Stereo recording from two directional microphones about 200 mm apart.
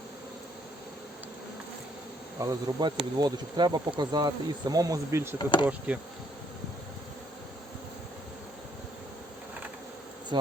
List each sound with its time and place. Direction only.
2.4 s insect: 20° right (ahead or behind)
5.4 s speech: 25° left (ahead or behind)
5.9 s insect: 5° right (ahead or behind)